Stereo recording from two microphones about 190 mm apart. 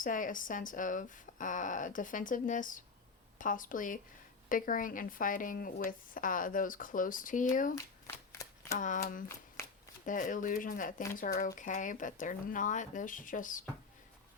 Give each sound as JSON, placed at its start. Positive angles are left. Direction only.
{"t": 0.0, "sound": "speech", "side_deg": 45}
{"t": 8.0, "sound": "shuffling cards", "side_deg": 15}
{"t": 8.8, "sound": "speech", "side_deg": 45}